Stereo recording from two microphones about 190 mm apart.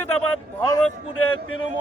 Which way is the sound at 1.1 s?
90° left.